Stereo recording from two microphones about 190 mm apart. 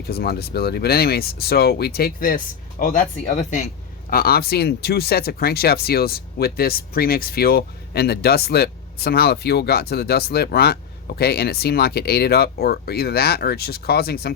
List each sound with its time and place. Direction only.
0.1 s speech: 55° left (ahead or behind)
4.1 s speech: 50° left (ahead or behind)